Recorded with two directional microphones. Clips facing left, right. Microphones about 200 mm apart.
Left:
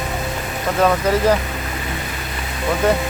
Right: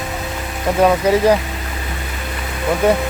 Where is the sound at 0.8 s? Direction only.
10° right (ahead or behind).